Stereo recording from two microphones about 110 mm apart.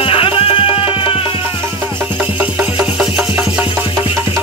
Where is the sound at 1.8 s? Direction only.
20° right (ahead or behind).